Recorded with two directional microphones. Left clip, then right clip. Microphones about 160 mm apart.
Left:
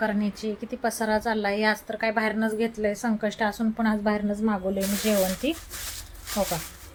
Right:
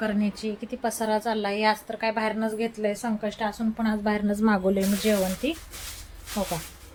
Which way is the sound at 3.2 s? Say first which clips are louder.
Left 3 dB; 25° left (ahead or behind).